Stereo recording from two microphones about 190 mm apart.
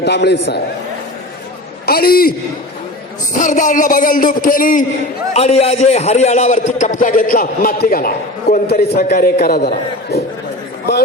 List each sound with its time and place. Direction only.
0.0 s a man's voice: 60° left (ahead or behind)
1.9 s a man's voice: 50° left (ahead or behind)
3.3 s a man's voice: 40° left (ahead or behind)
5.3 s a man's voice: 35° left (ahead or behind); by 10.2 s 50° left (ahead or behind)